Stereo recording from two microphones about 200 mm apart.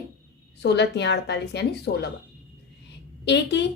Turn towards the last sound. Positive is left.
turn(degrees=60)  # may be behind; listen again after turning